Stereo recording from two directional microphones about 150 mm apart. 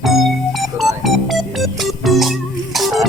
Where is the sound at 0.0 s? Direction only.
Centre (ahead or behind).